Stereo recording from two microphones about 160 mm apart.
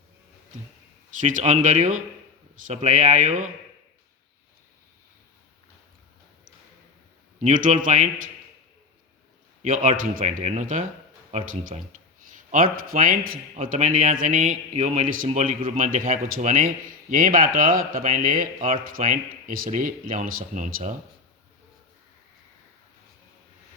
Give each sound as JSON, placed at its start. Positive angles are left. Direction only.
{"t": 1.2, "sound": "speech", "side_deg": -50}
{"t": 7.4, "sound": "speech", "side_deg": -55}
{"t": 9.6, "sound": "a man's voice", "side_deg": -55}
{"t": 12.5, "sound": "a man's voice", "side_deg": -60}